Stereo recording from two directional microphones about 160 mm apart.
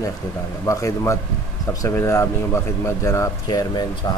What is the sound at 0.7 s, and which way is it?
Speech, 20° left (ahead or behind).